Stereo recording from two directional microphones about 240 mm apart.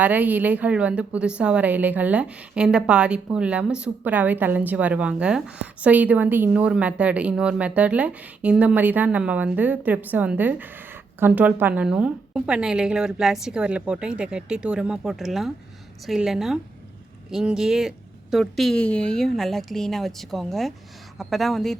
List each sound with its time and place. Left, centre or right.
0.0 s a woman's voice: centre